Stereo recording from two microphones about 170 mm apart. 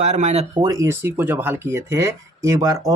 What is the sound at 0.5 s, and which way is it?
Speech, 20° right (ahead or behind).